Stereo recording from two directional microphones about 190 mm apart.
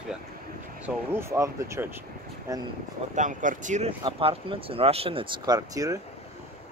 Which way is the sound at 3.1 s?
40° right (ahead or behind).